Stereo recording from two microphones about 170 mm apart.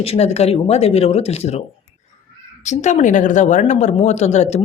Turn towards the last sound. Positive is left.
turn(degrees=40)  # may be behind; listen again after turning